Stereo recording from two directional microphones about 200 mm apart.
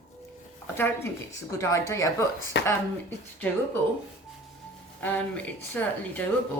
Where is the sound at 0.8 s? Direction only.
10° left (ahead or behind).